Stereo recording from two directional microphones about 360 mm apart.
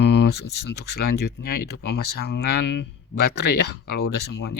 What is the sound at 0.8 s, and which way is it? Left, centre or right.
Speech, left.